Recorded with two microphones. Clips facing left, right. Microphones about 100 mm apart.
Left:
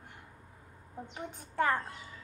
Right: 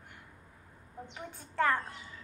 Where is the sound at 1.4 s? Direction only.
15° left (ahead or behind).